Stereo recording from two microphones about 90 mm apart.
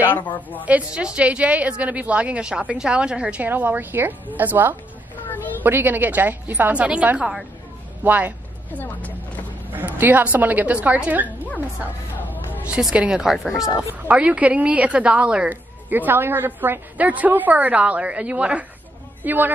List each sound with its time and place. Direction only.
0.7 s a woman's voice: 15° right (ahead or behind)
8.7 s speech: 15° left (ahead or behind)
9.7 s a woman's voice: 20° right (ahead or behind)
12.6 s a woman's voice: 10° right (ahead or behind)